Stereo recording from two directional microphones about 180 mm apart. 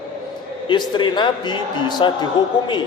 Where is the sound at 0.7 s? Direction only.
25° left (ahead or behind).